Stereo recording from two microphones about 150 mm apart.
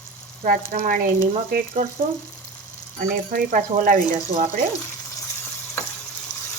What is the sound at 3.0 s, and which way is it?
Speech, 60° right (ahead or behind).